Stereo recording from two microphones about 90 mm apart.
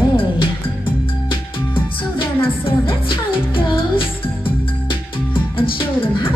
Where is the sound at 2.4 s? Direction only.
85° left.